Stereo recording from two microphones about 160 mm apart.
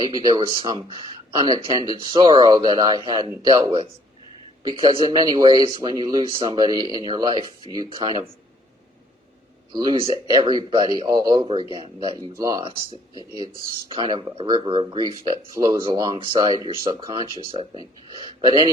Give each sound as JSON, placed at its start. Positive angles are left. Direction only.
{"t": 0.0, "sound": "speech", "side_deg": -25}
{"t": 9.7, "sound": "speech", "side_deg": -25}